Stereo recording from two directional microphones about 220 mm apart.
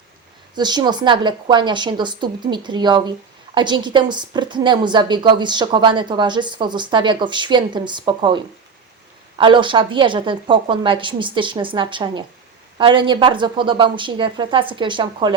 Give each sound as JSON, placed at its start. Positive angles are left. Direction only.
{"t": 0.5, "sound": "a woman's voice", "side_deg": -20}